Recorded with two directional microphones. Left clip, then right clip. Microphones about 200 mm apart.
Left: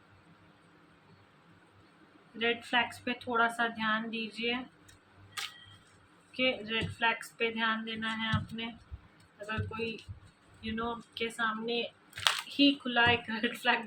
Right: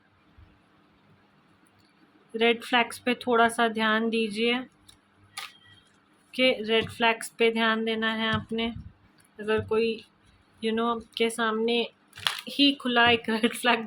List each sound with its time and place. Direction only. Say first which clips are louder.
2.4 s speech: right 7 dB; 60° right (ahead or behind)
6.3 s speech: right 8 dB; 55° right (ahead or behind)